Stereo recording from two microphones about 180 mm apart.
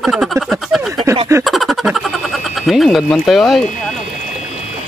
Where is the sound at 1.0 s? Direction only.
25° right (ahead or behind).